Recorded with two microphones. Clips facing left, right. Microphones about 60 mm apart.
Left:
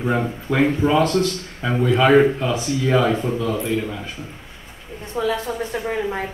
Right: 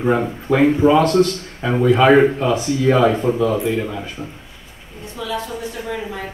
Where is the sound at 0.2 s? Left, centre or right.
Centre.